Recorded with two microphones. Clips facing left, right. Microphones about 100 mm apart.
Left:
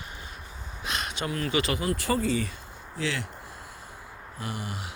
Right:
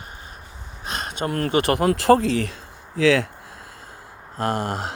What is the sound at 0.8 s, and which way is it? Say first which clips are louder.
Speech: right 5 dB; 40° right (ahead or behind).